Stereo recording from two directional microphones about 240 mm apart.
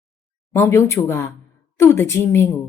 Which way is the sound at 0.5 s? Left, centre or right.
Centre.